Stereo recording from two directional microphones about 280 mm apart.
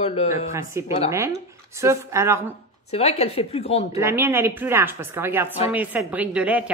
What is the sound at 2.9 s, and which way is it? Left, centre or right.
Speech, left.